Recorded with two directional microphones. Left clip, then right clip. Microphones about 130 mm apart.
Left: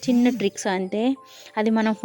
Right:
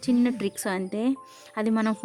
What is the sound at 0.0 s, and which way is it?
Speech, 10° left (ahead or behind).